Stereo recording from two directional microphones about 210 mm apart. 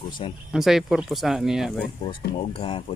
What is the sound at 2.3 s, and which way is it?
Speech, 25° left (ahead or behind).